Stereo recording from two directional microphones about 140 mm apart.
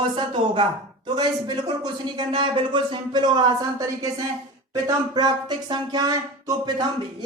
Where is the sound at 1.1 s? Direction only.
30° right (ahead or behind).